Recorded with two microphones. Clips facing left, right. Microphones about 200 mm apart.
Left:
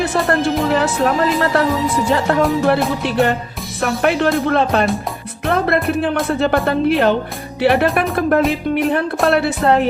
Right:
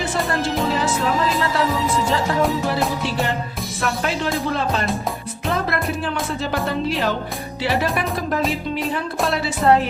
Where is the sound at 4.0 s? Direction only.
60° left (ahead or behind).